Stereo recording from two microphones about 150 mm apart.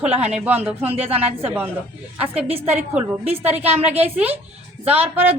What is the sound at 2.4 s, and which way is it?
Speech, 40° right (ahead or behind).